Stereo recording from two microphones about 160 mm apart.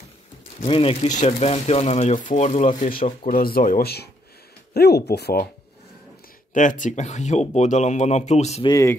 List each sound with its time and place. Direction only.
0.6 s speech: 35° left (ahead or behind); by 5.4 s 90° left
6.5 s speech: 50° left (ahead or behind)
8.6 s speech: 20° left (ahead or behind)